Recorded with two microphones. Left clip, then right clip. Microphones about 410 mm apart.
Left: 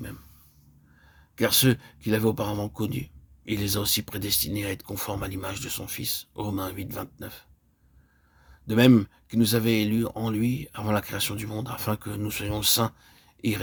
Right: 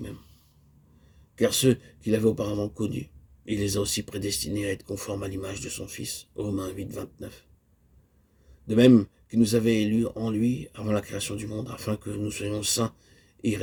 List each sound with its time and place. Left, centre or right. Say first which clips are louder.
1.4 s speech: even; left
8.6 s speech: right 1 dB; left